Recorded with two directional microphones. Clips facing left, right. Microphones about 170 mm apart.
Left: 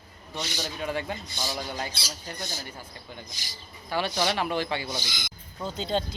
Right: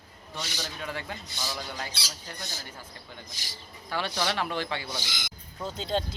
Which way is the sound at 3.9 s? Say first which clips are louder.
Left 3 dB; 10° left (ahead or behind).